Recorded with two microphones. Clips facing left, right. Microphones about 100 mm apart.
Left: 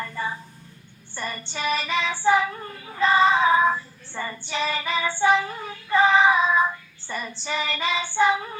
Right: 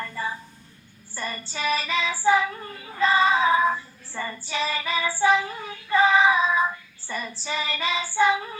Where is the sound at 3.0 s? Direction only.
Centre (ahead or behind).